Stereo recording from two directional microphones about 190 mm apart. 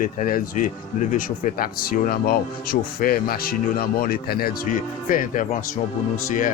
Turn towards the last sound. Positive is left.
turn(degrees=45)  # may be behind; listen again after turning